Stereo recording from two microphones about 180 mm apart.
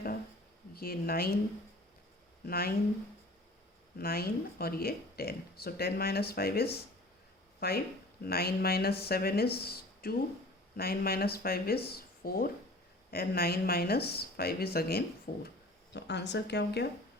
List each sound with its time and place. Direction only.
0.7 s speech: 55° left (ahead or behind)
2.5 s speech: 55° left (ahead or behind)
3.9 s speech: 60° left (ahead or behind)
15.4 s speech: 70° left (ahead or behind)